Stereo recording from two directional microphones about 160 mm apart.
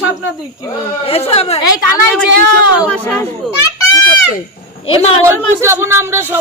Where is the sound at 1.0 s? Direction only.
35° left (ahead or behind).